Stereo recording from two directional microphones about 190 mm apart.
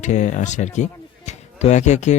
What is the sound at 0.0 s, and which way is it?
Speech, 40° left (ahead or behind).